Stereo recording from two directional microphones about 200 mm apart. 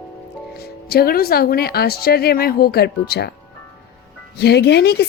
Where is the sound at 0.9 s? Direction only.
50° left (ahead or behind).